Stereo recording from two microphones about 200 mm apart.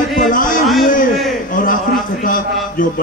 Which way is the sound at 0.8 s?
40° left (ahead or behind).